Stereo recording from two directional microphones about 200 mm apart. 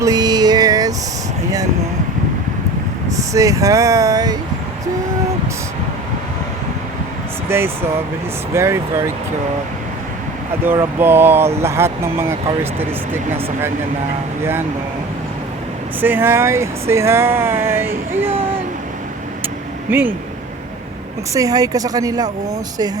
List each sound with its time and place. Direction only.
0.0 s a sound: 20° right (ahead or behind)
3.2 s speech: 15° right (ahead or behind)
7.5 s speech: 10° right (ahead or behind)
10.6 s speech: 10° right (ahead or behind)
16.0 s speech: 10° right (ahead or behind)
19.9 s speech: 10° right (ahead or behind)
21.3 s speech: 15° right (ahead or behind)